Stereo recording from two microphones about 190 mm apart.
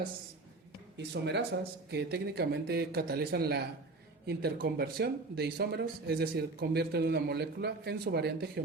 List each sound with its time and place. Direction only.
0.9 s speech: 65° right (ahead or behind)